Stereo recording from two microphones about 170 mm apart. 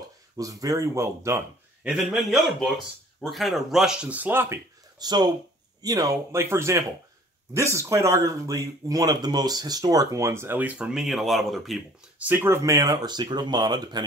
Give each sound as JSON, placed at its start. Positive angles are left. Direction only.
{"t": 0.4, "sound": "speech", "side_deg": -20}
{"t": 1.9, "sound": "speech", "side_deg": 0}
{"t": 4.9, "sound": "speech", "side_deg": -25}